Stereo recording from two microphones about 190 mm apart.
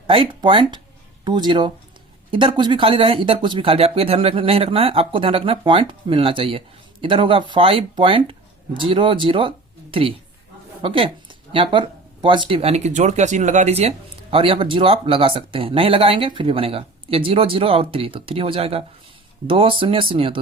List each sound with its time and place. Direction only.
0.1 s speech: 25° right (ahead or behind)